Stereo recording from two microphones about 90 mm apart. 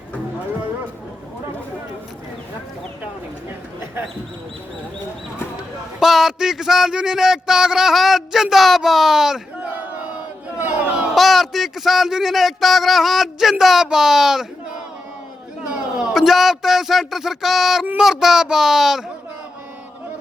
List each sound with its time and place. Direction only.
6.0 s a man's voice: 5° right (ahead or behind)
9.6 s battle cry: 20° right (ahead or behind)
10.6 s a sound: 15° right (ahead or behind)
11.1 s a man's voice: centre (ahead or behind)
16.0 s a man's voice: 5° right (ahead or behind)